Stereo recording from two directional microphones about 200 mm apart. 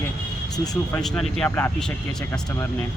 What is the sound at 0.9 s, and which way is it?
Speech, centre (ahead or behind).